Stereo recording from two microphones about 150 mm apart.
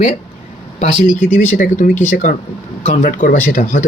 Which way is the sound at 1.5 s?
60° left (ahead or behind).